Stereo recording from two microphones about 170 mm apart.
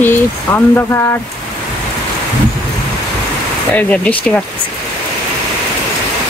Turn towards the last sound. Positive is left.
turn(degrees=10)  # may be behind; listen again after turning